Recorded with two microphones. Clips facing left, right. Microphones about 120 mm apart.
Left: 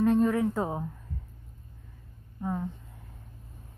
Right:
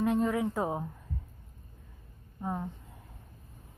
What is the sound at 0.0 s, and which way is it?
Speech, 10° right (ahead or behind).